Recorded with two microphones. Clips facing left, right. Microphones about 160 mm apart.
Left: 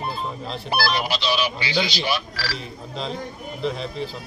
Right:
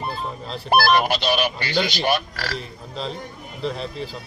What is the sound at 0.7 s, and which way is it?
Speech, 50° right (ahead or behind).